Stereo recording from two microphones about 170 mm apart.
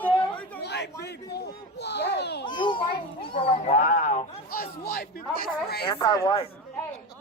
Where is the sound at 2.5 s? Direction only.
30° left (ahead or behind).